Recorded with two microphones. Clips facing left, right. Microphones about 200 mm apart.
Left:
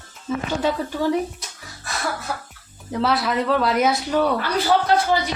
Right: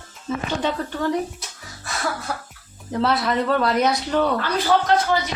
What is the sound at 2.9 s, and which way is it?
A man's voice, centre (ahead or behind).